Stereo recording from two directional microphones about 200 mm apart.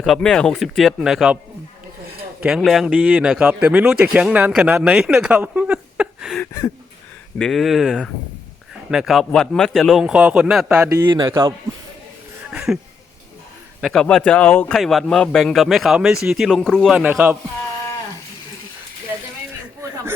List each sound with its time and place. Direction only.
0.0 s a man's voice: centre (ahead or behind)
2.4 s a man's voice: centre (ahead or behind)
6.4 s speech: 15° left (ahead or behind)
7.3 s a man's voice: centre (ahead or behind)
10.9 s speech: 20° right (ahead or behind)
12.5 s a sound: 5° right (ahead or behind)
13.8 s a man's voice: 5° left (ahead or behind)
19.8 s a sound: 15° right (ahead or behind)